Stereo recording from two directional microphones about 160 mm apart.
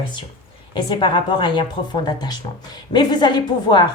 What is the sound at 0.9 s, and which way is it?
A woman's voice, 30° left (ahead or behind).